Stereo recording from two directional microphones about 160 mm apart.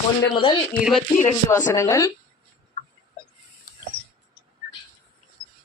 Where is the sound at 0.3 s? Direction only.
30° left (ahead or behind).